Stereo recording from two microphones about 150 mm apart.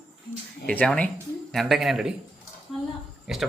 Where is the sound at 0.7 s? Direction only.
10° left (ahead or behind).